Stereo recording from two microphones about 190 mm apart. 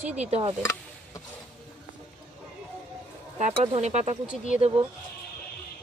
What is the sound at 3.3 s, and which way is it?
Speech, 35° right (ahead or behind).